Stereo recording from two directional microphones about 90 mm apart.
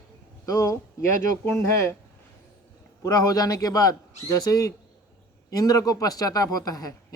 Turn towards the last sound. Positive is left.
turn(degrees=45)  # may be behind; listen again after turning